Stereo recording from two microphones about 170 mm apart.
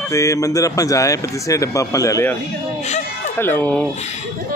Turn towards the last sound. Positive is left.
turn(degrees=10)  # may be behind; listen again after turning